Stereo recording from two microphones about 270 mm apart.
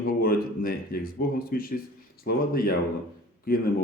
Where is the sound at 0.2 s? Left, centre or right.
Left.